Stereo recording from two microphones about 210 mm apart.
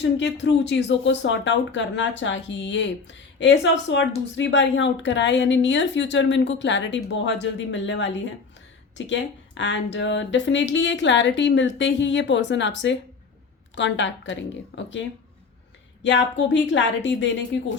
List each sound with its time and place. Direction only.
0.0 s speech: 60° left (ahead or behind)
16.0 s speech: 60° left (ahead or behind)